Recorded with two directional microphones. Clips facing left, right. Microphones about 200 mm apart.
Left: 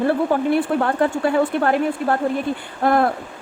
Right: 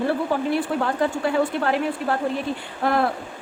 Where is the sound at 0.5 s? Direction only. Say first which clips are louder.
Left 4 dB; 55° left (ahead or behind).